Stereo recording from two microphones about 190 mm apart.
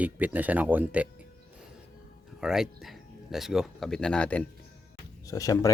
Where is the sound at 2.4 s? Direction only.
Centre (ahead or behind).